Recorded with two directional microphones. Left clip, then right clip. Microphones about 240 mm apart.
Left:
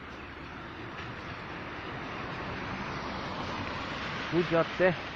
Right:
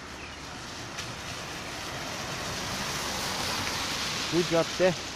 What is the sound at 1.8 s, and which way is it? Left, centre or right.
Vehicle, right.